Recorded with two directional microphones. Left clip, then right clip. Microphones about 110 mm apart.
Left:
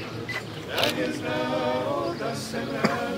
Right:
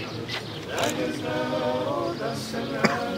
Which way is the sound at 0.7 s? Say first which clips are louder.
Left 1 dB; 5° left (ahead or behind).